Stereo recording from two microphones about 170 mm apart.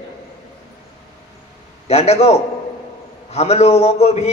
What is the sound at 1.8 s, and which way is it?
A man's voice, 40° left (ahead or behind).